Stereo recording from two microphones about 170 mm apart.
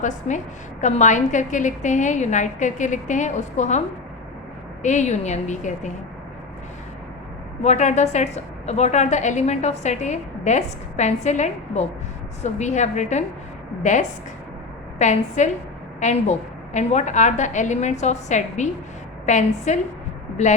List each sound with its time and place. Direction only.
0.0 s a woman's voice: 45° left (ahead or behind)
7.6 s a woman's voice: 45° left (ahead or behind)
14.9 s a woman's voice: 45° left (ahead or behind)